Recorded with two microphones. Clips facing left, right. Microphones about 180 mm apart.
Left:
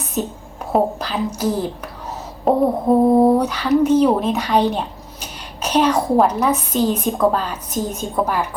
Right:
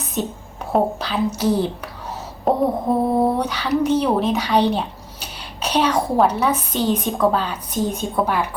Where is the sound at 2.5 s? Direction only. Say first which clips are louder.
Left 3 dB; centre (ahead or behind).